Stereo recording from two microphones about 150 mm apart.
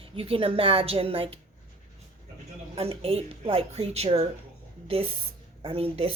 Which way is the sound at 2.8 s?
40° right (ahead or behind).